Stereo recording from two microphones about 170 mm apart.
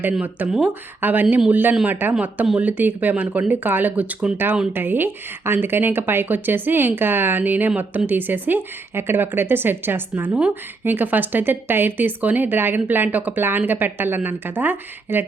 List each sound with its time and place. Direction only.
0.0 s speech: 10° right (ahead or behind)